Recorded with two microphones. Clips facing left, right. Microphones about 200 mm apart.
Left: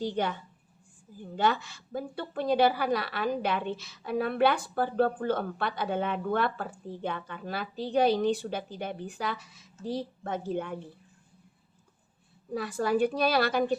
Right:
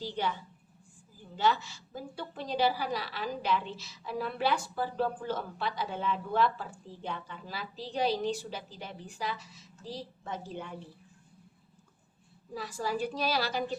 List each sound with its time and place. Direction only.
0.0 s a child's voice: 50° left (ahead or behind)
12.5 s a woman's voice: 60° left (ahead or behind)